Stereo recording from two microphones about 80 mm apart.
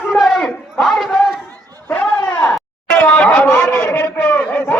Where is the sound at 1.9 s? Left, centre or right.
Left.